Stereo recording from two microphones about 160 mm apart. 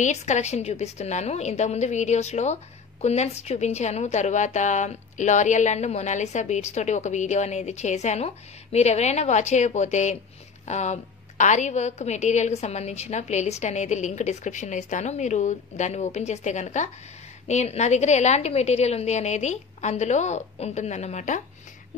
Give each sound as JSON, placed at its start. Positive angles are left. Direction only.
{"t": 0.0, "sound": "a woman's voice", "side_deg": 45}